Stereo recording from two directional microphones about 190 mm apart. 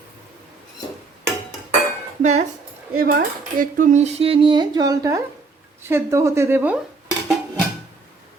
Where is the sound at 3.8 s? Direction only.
40° right (ahead or behind); by 6.8 s 10° right (ahead or behind).